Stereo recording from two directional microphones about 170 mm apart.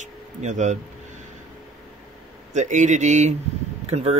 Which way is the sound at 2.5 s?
45° right (ahead or behind).